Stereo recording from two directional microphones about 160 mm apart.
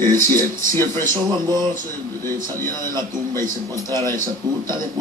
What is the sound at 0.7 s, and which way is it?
Speech, 15° left (ahead or behind).